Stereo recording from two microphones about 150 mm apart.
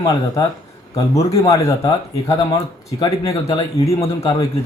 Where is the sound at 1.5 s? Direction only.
20° left (ahead or behind).